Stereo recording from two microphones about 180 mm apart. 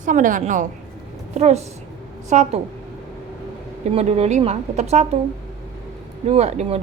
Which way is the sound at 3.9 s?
35° right (ahead or behind).